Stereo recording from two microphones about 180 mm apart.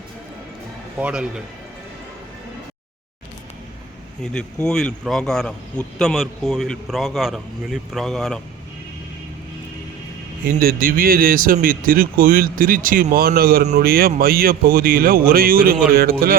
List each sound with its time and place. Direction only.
0.9 s speech: 5° right (ahead or behind)
4.2 s speech: 5° left (ahead or behind)
10.4 s a man's voice: 55° right (ahead or behind)